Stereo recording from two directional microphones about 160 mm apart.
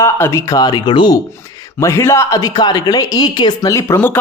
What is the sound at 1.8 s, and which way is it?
A woman's voice, 15° left (ahead or behind).